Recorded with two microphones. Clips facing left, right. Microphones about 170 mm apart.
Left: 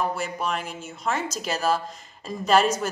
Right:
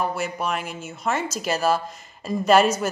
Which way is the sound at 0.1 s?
5° right (ahead or behind).